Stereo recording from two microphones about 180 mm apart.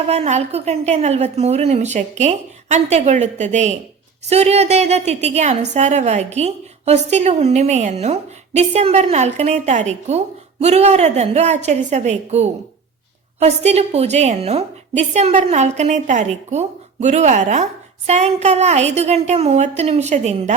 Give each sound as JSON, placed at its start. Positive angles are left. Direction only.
{"t": 0.1, "sound": "a woman's voice", "side_deg": -35}